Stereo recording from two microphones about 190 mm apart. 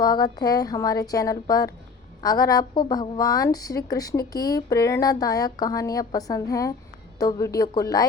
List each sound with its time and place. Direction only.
0.0 s a woman's voice: 20° left (ahead or behind)